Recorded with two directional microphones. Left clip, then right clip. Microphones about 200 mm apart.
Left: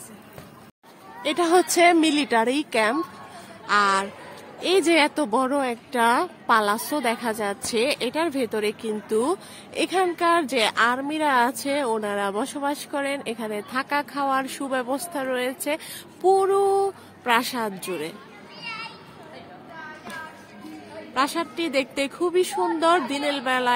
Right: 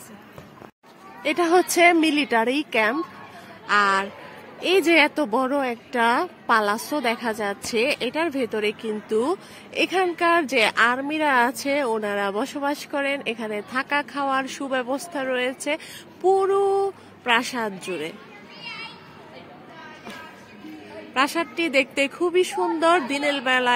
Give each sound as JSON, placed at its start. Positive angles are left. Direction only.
{"t": 1.3, "sound": "a woman's voice", "side_deg": -5}
{"t": 18.6, "sound": "children playing", "side_deg": 30}
{"t": 21.1, "sound": "a woman's voice", "side_deg": -10}